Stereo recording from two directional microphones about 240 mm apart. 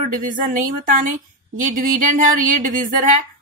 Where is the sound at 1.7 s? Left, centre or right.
Right.